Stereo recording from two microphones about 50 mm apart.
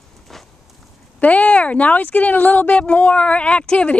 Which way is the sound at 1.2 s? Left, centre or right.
Left.